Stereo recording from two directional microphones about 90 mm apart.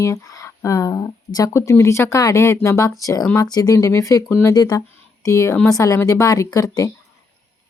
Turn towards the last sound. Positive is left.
turn(degrees=40)  # may be behind; listen again after turning